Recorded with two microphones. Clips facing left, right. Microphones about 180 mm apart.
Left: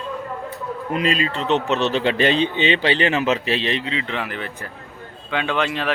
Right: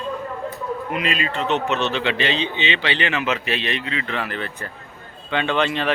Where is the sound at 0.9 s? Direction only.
35° left (ahead or behind).